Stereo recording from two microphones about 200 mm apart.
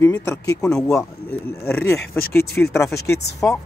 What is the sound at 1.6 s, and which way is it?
Speech, 10° left (ahead or behind).